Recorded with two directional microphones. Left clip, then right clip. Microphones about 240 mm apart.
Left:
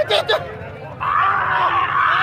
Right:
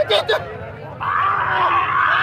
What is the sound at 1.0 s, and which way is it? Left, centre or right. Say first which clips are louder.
Groan: left 1 dB; centre.